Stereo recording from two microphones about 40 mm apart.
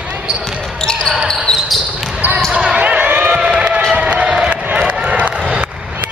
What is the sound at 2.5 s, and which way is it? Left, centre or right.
Basketball bounce, centre.